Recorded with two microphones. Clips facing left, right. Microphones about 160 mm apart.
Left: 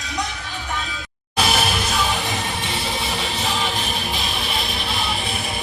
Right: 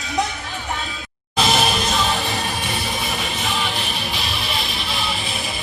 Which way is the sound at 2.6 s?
25° left (ahead or behind).